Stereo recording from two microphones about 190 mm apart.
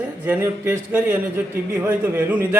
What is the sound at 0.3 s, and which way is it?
A man's voice, 10° right (ahead or behind).